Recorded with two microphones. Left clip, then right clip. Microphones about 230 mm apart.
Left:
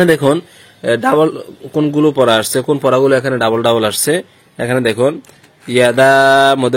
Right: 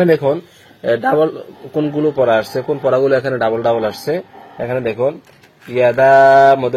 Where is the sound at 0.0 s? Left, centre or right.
Left.